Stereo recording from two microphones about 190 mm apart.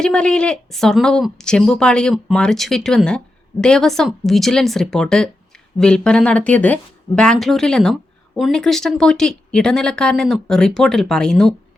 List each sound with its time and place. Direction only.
0.0 s speech: 5° left (ahead or behind)